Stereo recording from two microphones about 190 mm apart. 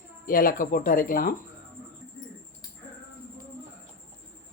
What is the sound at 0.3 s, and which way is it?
Speech, 45° left (ahead or behind).